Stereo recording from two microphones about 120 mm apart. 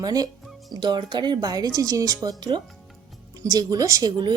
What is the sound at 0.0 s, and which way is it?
Speech, 30° right (ahead or behind).